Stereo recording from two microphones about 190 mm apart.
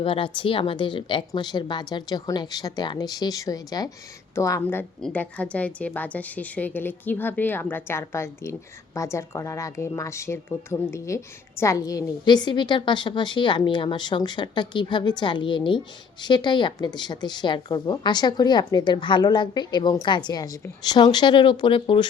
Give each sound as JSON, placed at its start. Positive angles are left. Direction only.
{"t": 0.0, "sound": "a woman's voice", "side_deg": 30}